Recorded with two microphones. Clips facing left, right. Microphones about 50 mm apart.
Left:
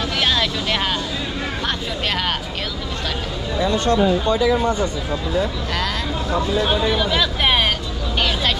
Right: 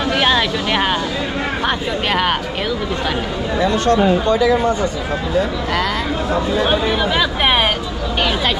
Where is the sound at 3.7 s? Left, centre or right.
Right.